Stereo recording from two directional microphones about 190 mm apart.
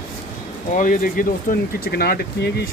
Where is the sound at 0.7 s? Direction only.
45° left (ahead or behind).